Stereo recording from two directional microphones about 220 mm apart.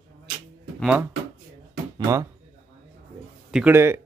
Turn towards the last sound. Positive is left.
turn(degrees=-10)  # may be behind; listen again after turning